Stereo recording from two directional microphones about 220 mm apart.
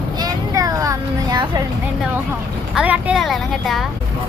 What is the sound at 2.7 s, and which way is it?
Speech, 5° right (ahead or behind).